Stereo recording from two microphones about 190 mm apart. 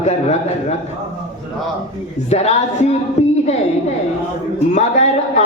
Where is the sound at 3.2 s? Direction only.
35° left (ahead or behind).